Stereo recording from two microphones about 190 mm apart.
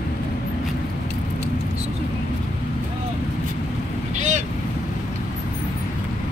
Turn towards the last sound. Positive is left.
turn(degrees=-40)  # may be behind; listen again after turning